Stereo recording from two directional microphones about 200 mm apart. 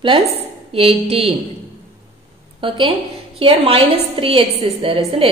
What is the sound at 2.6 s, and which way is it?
A woman's voice, 25° right (ahead or behind).